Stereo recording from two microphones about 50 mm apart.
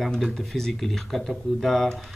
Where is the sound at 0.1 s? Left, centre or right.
Centre.